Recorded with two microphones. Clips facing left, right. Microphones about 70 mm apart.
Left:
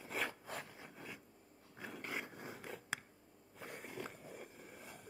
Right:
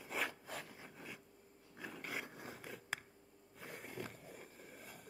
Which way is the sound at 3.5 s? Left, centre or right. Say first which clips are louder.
Left 1 dB; centre.